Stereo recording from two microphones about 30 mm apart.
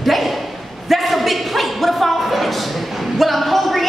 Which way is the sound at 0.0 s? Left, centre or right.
Centre.